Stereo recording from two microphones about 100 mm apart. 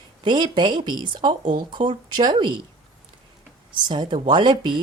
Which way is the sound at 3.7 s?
50° right (ahead or behind).